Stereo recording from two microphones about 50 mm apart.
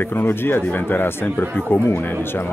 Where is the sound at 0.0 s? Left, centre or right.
Left.